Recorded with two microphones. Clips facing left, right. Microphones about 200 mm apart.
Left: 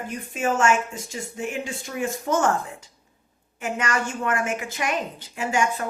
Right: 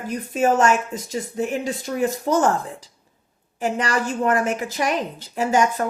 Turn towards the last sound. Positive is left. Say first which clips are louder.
# right 5 dB
turn(degrees=-40)  # may be behind; listen again after turning